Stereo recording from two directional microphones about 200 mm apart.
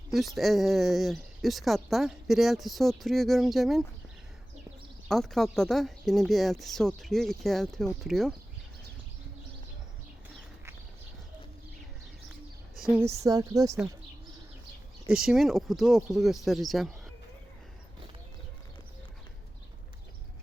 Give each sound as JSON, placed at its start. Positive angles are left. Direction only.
{"t": 0.3, "sound": "a woman's voice", "side_deg": 0}
{"t": 5.0, "sound": "a woman's voice", "side_deg": 0}
{"t": 13.0, "sound": "a woman's voice", "side_deg": -15}
{"t": 15.0, "sound": "a woman's voice", "side_deg": 0}